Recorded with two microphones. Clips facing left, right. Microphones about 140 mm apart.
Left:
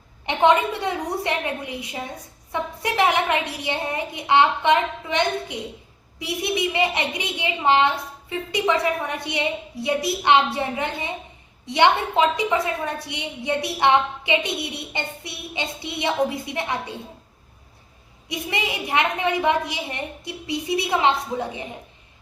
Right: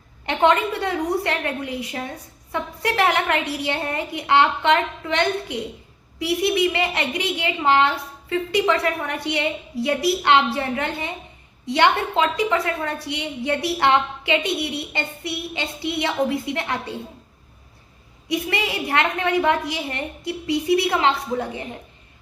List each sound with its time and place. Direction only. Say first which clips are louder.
0.3 s a woman's voice: even; 20° left (ahead or behind)
18.3 s a woman's voice: right 3 dB; 15° left (ahead or behind)